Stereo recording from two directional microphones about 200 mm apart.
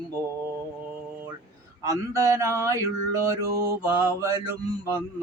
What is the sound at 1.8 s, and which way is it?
Mantra, 15° right (ahead or behind).